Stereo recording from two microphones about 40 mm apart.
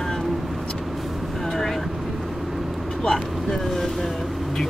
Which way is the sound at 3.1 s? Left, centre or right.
Centre.